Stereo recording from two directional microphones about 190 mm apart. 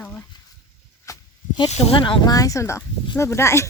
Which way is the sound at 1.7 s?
35° left (ahead or behind).